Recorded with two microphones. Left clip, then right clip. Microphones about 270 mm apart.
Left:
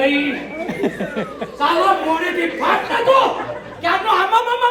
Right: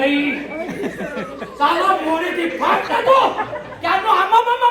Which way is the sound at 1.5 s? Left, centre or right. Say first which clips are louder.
Even; centre.